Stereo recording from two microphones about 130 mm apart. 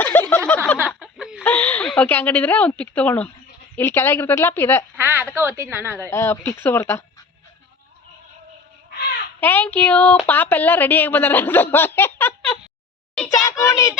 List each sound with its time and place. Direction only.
0.0 s a sound: 10° left (ahead or behind)
0.9 s a sound: 5° right (ahead or behind)
1.5 s a woman's voice: 10° left (ahead or behind)
4.9 s speech: 15° right (ahead or behind)
6.1 s speech: 20° left (ahead or behind)
9.4 s a woman's voice: 15° left (ahead or behind)